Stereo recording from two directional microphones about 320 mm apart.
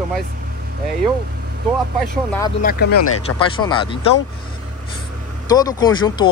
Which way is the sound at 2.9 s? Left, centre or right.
Left.